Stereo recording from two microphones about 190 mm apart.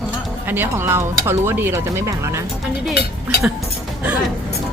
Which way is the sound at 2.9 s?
60° left (ahead or behind).